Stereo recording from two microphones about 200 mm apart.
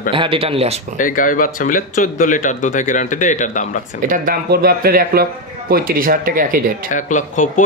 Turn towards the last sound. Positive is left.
turn(degrees=40)  # may be behind; listen again after turning